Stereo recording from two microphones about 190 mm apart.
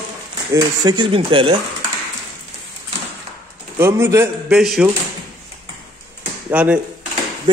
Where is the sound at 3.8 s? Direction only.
15° right (ahead or behind).